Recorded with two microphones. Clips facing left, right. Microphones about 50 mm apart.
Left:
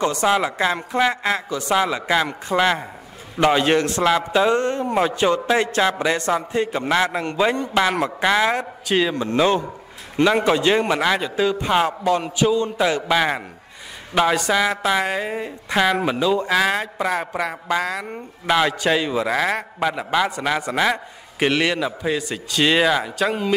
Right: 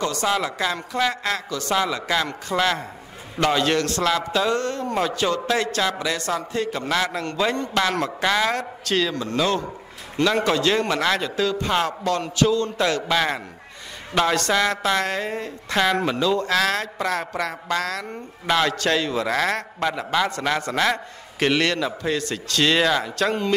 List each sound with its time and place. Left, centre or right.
0.0 s a man's voice: left; by 23.5 s centre